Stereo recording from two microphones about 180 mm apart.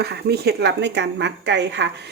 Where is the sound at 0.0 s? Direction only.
65° right (ahead or behind).